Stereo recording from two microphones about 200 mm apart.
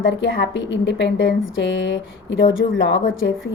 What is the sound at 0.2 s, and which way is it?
A woman's voice, 65° left (ahead or behind).